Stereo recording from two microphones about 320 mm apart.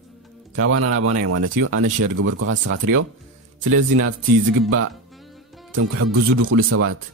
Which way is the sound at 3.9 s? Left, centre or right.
Right.